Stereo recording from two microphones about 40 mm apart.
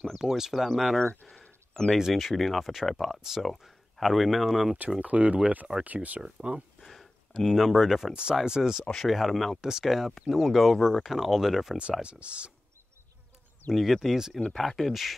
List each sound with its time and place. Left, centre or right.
0.1 s speech: centre
0.7 s speech: centre
2.0 s speech: centre
5.0 s speech: right
6.2 s speech: right
6.8 s a sound: centre
8.1 s speech: right
9.0 s speech: centre
9.6 s speech: centre
12.0 s speech: right
13.7 s speech: centre
14.5 s speech: centre